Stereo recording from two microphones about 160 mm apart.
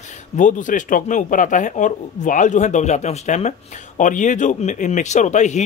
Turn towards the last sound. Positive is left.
turn(degrees=45)  # may be behind; listen again after turning